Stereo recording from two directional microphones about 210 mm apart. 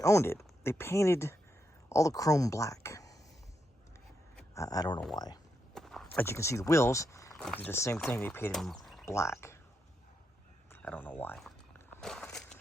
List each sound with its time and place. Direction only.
0.0 s speech: 15° left (ahead or behind)
4.5 s speech: 15° left (ahead or behind)
5.7 s a sound: centre (ahead or behind)
7.4 s speech: 5° left (ahead or behind)
9.0 s speech: 15° left (ahead or behind)
10.7 s a sound: 10° left (ahead or behind)